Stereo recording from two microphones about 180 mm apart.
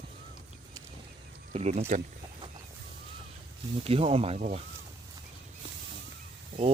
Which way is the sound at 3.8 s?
35° right (ahead or behind).